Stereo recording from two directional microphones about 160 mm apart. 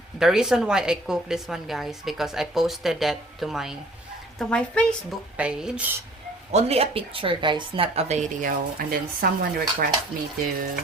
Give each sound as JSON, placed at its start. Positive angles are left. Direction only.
{"t": 0.2, "sound": "a woman's voice", "side_deg": -5}
{"t": 5.4, "sound": "speech", "side_deg": -5}
{"t": 6.5, "sound": "speech", "side_deg": -40}